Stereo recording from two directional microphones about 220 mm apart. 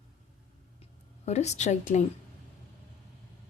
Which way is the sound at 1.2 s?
30° left (ahead or behind).